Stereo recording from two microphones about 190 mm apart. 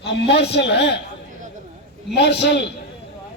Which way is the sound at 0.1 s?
65° left (ahead or behind).